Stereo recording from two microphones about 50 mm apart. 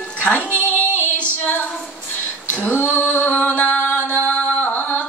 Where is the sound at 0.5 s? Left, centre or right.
Left.